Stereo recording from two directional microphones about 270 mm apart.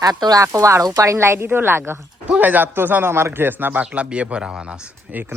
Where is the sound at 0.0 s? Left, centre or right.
Centre.